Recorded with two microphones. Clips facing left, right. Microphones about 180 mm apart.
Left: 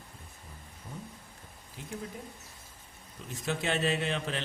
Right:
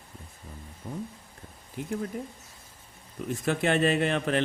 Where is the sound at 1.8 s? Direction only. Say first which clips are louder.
Right 11 dB; 55° right (ahead or behind).